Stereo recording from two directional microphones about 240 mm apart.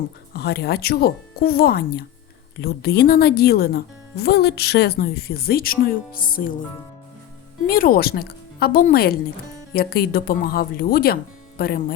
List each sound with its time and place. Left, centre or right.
0.3 s speech: left
7.7 s speech: left